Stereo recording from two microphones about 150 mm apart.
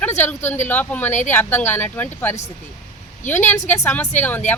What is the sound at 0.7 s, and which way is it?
Speech, 10° left (ahead or behind).